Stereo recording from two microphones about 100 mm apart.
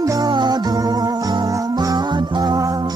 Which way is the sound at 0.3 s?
45° right (ahead or behind).